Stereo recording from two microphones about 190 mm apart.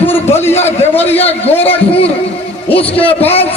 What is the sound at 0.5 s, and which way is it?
A man's voice, 35° left (ahead or behind).